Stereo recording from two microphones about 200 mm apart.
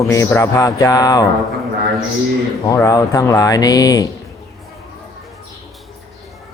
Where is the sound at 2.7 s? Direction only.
15° left (ahead or behind).